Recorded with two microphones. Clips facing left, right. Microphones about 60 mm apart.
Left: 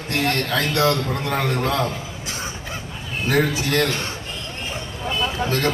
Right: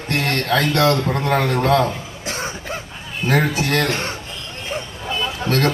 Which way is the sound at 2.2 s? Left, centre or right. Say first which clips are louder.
Right 7 dB; right.